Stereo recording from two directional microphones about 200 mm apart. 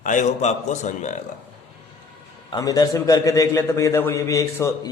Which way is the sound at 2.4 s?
20° left (ahead or behind).